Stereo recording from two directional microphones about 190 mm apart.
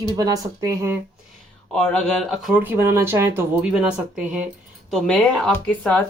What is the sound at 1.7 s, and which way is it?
Speech, 5° left (ahead or behind).